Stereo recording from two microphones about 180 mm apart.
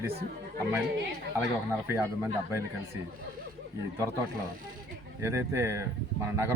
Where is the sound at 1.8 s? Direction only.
15° right (ahead or behind).